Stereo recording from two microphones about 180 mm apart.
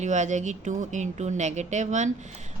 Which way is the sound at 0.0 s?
40° right (ahead or behind).